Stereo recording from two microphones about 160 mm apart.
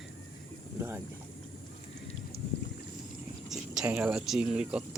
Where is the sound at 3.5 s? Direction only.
5° right (ahead or behind).